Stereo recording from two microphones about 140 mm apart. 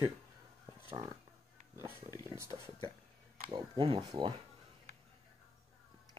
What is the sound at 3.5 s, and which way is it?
Speech, 40° right (ahead or behind).